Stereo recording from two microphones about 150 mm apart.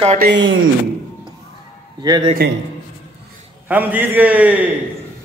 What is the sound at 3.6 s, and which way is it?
A man's voice, 10° right (ahead or behind).